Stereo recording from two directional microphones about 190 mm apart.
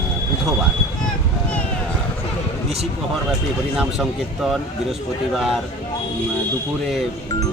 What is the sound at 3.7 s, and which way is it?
Speech, centre (ahead or behind).